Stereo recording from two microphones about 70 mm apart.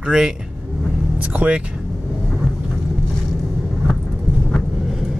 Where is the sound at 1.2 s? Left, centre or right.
Centre.